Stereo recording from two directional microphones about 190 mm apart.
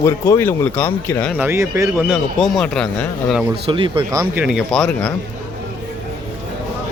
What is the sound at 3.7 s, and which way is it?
Speech, 25° right (ahead or behind).